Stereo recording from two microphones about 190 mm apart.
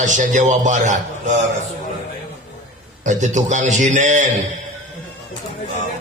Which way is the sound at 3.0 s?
40° right (ahead or behind).